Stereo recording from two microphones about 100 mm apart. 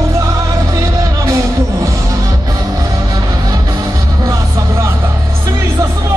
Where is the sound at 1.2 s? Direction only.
30° right (ahead or behind).